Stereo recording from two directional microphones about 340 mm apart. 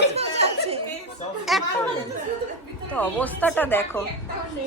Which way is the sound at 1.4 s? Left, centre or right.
Centre.